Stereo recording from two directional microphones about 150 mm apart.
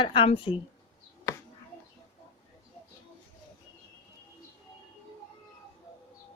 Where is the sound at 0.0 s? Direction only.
35° left (ahead or behind).